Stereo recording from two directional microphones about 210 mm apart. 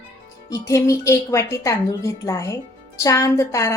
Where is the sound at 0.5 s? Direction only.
15° left (ahead or behind).